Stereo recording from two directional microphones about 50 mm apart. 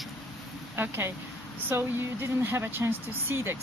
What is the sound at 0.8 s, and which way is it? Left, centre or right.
Speech, right.